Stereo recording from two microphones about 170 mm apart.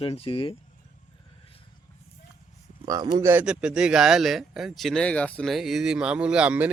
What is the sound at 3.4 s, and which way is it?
Speech, 5° right (ahead or behind).